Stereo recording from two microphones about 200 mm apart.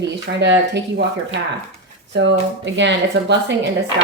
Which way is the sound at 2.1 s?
60° right (ahead or behind).